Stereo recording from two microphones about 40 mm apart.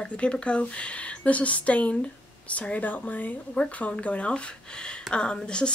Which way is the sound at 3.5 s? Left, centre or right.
Left.